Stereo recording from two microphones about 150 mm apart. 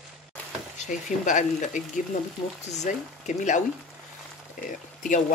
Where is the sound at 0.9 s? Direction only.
55° left (ahead or behind).